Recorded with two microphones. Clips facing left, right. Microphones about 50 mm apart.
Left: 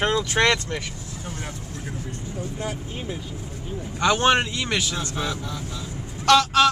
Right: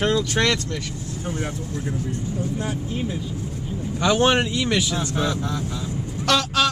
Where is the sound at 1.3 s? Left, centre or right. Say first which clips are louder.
Right 7 dB; right.